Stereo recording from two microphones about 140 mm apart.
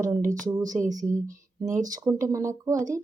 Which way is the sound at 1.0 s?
65° right (ahead or behind).